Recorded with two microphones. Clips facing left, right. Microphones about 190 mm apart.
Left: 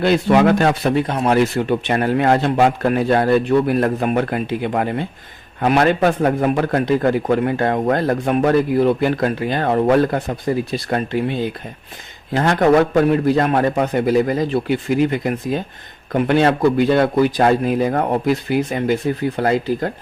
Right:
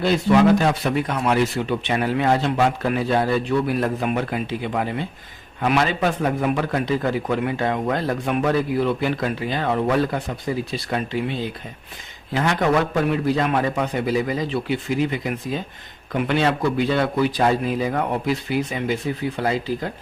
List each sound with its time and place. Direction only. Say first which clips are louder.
0.0 s speech: left 3 dB; 60° left (ahead or behind)
0.9 s speech: left 4 dB; 35° left (ahead or behind)
1.5 s a man's voice: left 4 dB; 50° left (ahead or behind)